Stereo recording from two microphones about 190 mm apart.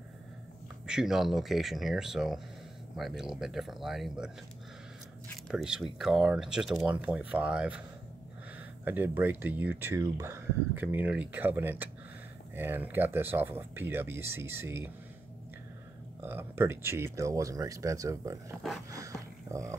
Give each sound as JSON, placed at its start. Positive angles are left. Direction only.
{"t": 0.8, "sound": "speech", "side_deg": -5}
{"t": 5.5, "sound": "speech", "side_deg": -5}
{"t": 8.8, "sound": "speech", "side_deg": -10}
{"t": 16.2, "sound": "speech", "side_deg": -10}
{"t": 18.9, "sound": "a sound", "side_deg": -15}